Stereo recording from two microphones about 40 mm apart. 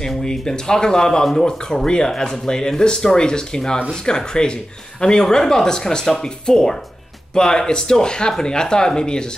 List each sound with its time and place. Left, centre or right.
0.2 s speech: centre